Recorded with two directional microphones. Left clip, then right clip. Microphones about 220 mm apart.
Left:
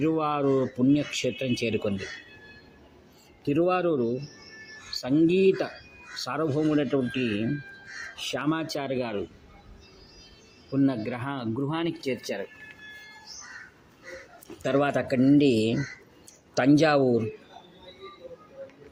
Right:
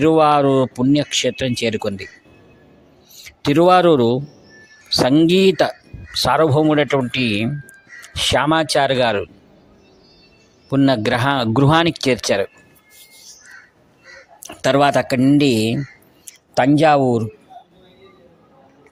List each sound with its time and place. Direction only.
0.0 s speech: 50° right (ahead or behind)
3.4 s speech: 45° right (ahead or behind)
10.7 s speech: 50° right (ahead or behind)
14.6 s speech: 45° right (ahead or behind)